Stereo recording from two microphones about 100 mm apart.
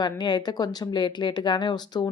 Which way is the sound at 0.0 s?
45° left (ahead or behind).